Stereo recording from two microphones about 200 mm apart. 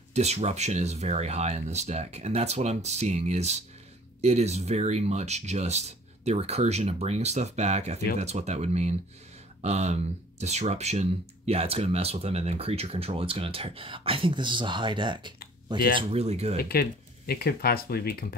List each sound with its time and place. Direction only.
0.1 s speech: 35° right (ahead or behind)
16.5 s speech: 50° left (ahead or behind)